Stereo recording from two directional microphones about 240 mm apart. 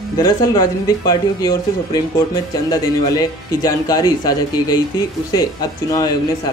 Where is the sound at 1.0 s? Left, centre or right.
Centre.